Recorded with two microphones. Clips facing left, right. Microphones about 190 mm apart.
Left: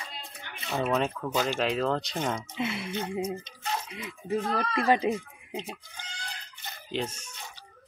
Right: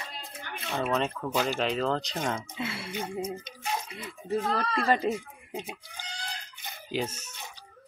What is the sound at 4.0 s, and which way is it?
Speech, 15° left (ahead or behind).